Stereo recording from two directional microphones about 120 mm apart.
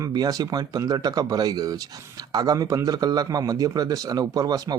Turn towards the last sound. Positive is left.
turn(degrees=-30)  # may be behind; listen again after turning